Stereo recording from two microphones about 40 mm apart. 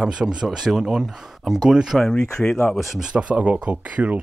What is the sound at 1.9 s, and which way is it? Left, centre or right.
Speech, centre.